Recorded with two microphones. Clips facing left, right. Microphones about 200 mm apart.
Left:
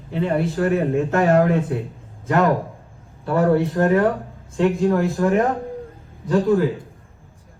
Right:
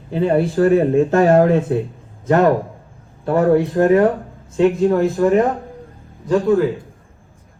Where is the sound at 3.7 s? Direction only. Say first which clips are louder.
Right 4 dB; 25° right (ahead or behind).